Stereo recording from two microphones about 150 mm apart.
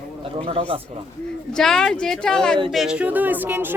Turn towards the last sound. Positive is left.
turn(degrees=-15)  # may be behind; listen again after turning